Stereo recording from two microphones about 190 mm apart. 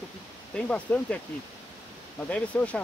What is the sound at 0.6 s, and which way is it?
Speech, 5° left (ahead or behind).